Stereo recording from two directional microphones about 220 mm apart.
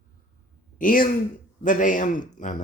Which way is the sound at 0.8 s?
40° left (ahead or behind).